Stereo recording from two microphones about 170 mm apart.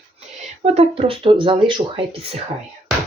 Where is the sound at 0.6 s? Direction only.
35° right (ahead or behind).